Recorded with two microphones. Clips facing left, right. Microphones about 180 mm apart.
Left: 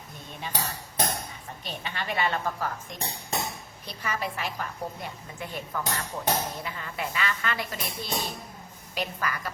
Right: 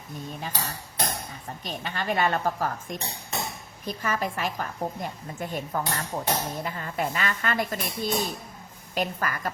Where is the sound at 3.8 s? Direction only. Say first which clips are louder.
Right 4 dB; 45° right (ahead or behind).